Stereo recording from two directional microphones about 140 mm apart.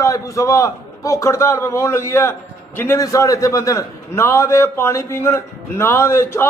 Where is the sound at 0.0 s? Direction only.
25° left (ahead or behind).